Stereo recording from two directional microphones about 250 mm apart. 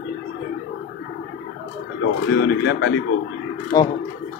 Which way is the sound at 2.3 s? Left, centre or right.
Left.